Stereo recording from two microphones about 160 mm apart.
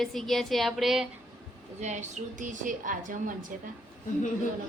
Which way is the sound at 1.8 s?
50° right (ahead or behind).